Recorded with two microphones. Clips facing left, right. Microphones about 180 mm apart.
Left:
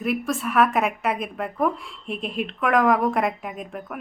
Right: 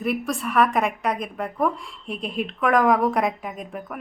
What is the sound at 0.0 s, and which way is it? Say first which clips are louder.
A woman's voice: even; centre (ahead or behind).